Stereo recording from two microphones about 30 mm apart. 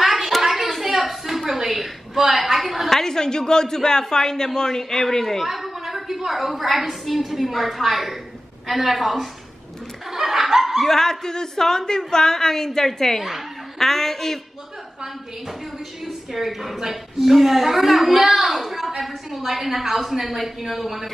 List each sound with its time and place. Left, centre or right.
0.4 s a sound: centre
2.9 s a woman's voice: centre
5.4 s a woman's voice: centre
10.1 s snicker: centre
10.8 s a woman's voice: centre
16.1 s a woman's voice: centre